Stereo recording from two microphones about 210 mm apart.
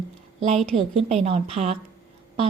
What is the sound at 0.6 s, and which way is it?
A woman's voice, 30° right (ahead or behind).